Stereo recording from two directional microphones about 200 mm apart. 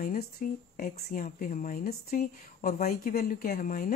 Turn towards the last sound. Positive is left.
turn(degrees=45)  # may be behind; listen again after turning